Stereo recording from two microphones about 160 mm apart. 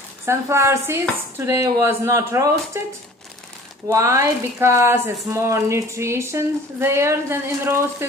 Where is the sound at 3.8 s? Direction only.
20° right (ahead or behind).